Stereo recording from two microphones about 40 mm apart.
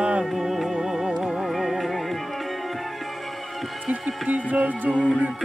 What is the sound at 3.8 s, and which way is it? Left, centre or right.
Music, right.